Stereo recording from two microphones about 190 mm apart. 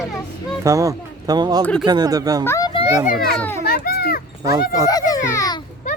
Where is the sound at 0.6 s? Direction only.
15° right (ahead or behind).